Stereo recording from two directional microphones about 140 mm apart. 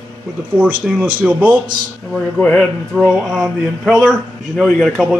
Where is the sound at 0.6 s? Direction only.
10° right (ahead or behind).